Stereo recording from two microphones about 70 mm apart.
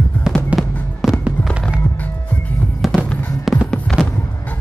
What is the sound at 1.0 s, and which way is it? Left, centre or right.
Fireworks, centre.